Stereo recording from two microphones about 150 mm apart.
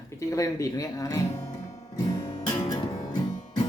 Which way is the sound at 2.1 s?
25° left (ahead or behind).